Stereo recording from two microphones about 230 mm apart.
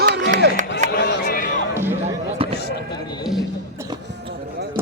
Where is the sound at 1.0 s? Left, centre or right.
Left.